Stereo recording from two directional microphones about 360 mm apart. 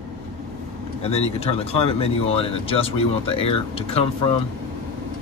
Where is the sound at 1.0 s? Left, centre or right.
Centre.